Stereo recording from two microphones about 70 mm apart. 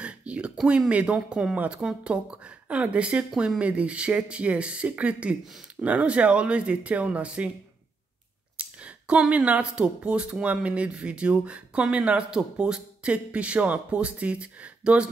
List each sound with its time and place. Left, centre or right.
0.0 s a sound: centre
0.7 s speech: centre
8.5 s speech: centre